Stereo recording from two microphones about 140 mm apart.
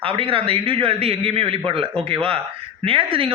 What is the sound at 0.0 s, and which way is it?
A man's voice, 40° right (ahead or behind).